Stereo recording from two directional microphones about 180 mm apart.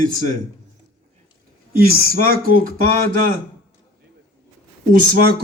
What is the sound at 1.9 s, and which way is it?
A man's voice, 55° right (ahead or behind).